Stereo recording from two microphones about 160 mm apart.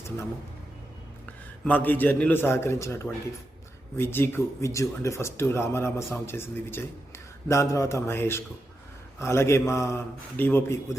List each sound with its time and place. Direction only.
1.6 s speech: 10° left (ahead or behind)